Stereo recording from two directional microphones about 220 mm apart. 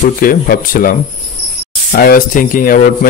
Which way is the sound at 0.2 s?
40° left (ahead or behind).